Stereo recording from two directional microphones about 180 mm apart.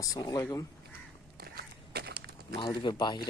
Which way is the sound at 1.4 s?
60° right (ahead or behind).